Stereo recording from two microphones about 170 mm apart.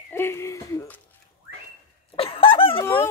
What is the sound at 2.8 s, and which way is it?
Fowl, 15° left (ahead or behind).